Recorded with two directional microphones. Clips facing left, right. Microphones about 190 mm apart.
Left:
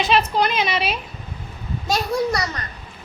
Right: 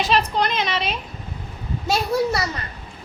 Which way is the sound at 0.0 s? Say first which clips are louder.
Left 2 dB; 5° left (ahead or behind).